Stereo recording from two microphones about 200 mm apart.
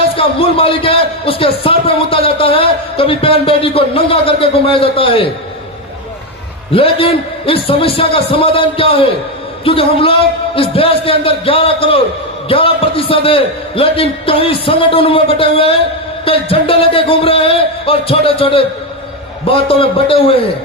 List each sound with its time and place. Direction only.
0.2 s a man's voice: 25° left (ahead or behind)
6.7 s a man's voice: 30° left (ahead or behind)